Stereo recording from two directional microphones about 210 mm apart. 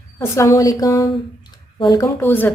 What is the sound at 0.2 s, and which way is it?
Speech, 15° left (ahead or behind).